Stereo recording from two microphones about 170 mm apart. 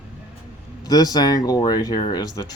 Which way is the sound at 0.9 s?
25° left (ahead or behind).